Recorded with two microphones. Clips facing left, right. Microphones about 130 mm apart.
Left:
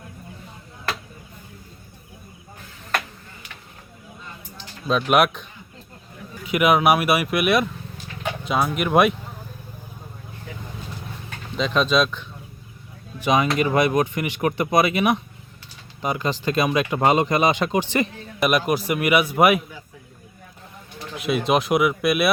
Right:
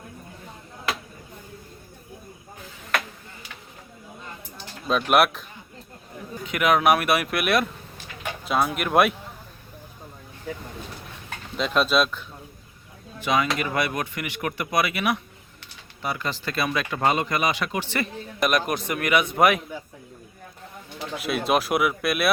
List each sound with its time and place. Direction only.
4.9 s speech: centre (ahead or behind)
11.5 s speech: 5° right (ahead or behind)
13.1 s speech: 20° left (ahead or behind)
18.3 s speech: 5° left (ahead or behind)
21.2 s speech: centre (ahead or behind)